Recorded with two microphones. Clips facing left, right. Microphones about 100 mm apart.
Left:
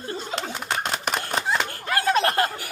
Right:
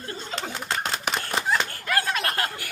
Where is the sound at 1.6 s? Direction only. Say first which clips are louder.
Left 3 dB; 25° left (ahead or behind).